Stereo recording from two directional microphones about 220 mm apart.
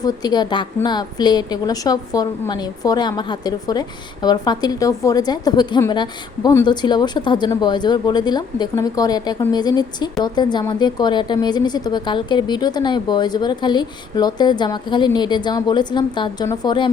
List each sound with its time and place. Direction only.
0.0 s a woman's voice: 20° left (ahead or behind)